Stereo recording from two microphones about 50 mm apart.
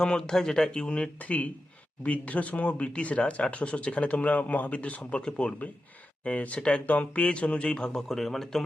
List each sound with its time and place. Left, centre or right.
0.0 s speech: centre
1.2 s speech: left; by 8.6 s centre